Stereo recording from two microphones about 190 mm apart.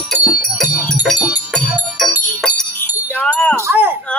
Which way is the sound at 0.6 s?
5° right (ahead or behind).